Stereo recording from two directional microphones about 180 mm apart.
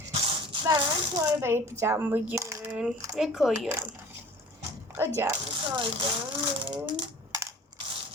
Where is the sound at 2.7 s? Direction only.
5° right (ahead or behind).